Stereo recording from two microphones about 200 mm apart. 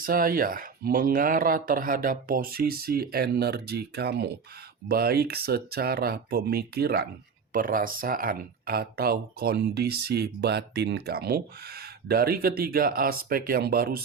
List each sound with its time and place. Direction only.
0.0 s speech: 45° right (ahead or behind)